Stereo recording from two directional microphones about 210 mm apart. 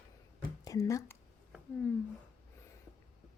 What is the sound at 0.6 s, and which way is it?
Speech, 15° left (ahead or behind).